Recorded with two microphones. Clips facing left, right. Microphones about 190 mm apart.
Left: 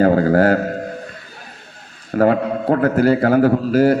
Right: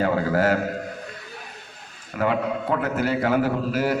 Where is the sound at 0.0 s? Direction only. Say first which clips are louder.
Left 8 dB; 45° left (ahead or behind).